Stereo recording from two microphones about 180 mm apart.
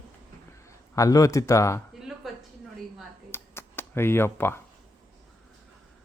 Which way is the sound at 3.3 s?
10° left (ahead or behind).